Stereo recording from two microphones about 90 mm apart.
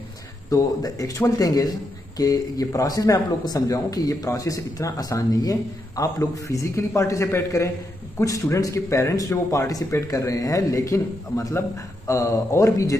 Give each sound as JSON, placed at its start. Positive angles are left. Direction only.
{"t": 0.5, "sound": "speech", "side_deg": 40}